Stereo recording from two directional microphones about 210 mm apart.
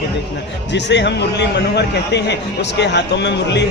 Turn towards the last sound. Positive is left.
turn(degrees=55)  # may be behind; listen again after turning